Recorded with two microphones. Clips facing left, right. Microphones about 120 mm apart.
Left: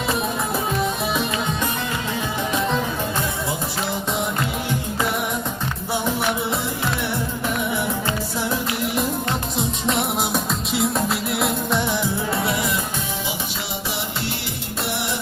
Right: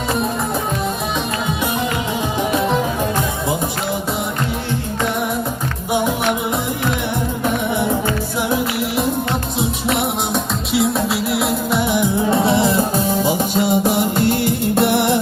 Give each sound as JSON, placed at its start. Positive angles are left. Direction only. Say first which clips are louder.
{"t": 8.4, "sound": "music", "louder": "right 7 dB", "side_deg": -15}
{"t": 9.6, "sound": "music", "louder": "right 3 dB", "side_deg": 0}
{"t": 11.9, "sound": "music", "louder": "right 7 dB", "side_deg": -15}
{"t": 12.4, "sound": "music", "louder": "right 8 dB", "side_deg": -30}